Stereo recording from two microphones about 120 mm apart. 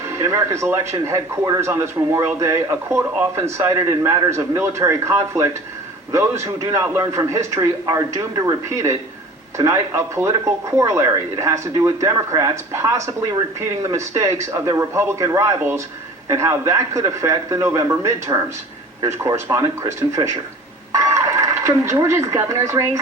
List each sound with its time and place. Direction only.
0.2 s a man's voice: 25° right (ahead or behind)